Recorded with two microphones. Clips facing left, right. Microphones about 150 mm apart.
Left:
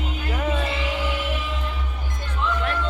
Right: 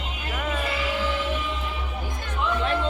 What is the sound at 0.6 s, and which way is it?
Music, 20° left (ahead or behind).